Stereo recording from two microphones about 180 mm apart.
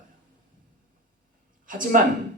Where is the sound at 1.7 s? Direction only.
50° right (ahead or behind).